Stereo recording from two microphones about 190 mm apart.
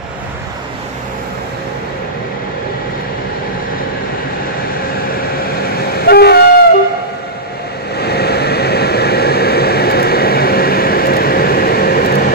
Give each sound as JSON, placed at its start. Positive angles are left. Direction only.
{"t": 6.0, "sound": "train", "side_deg": 55}
{"t": 8.0, "sound": "vehicle", "side_deg": 55}